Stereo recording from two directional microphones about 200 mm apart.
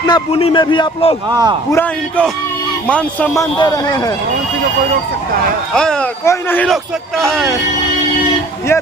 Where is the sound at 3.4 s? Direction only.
20° left (ahead or behind).